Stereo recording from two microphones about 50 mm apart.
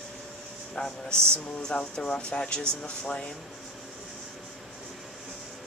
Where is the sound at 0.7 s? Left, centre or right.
Centre.